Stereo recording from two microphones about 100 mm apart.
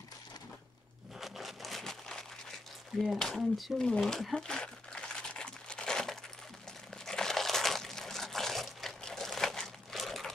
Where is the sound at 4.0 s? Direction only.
Centre (ahead or behind).